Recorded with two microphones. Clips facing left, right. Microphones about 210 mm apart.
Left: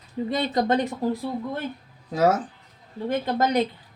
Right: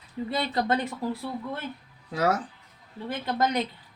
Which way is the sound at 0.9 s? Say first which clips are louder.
Left 5 dB; 15° left (ahead or behind).